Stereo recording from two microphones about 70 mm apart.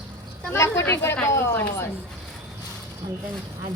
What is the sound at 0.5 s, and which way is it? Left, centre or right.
Speech, left.